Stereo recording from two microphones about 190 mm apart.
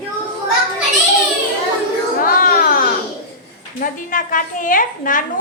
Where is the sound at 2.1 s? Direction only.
50° left (ahead or behind).